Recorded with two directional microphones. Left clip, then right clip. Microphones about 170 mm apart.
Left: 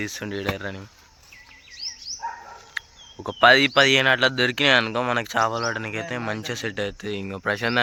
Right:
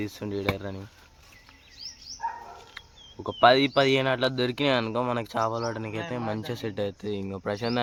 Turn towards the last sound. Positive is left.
turn(degrees=0)  # may be behind; listen again after turning